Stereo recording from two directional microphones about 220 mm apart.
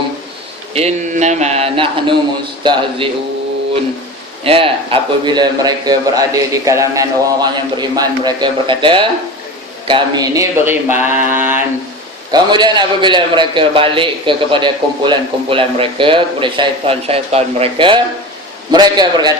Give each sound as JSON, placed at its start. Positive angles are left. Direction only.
{"t": 0.7, "sound": "a man's voice", "side_deg": -30}
{"t": 4.4, "sound": "a man's voice", "side_deg": -25}